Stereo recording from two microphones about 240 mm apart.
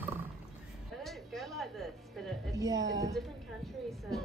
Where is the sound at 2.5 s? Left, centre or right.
Centre.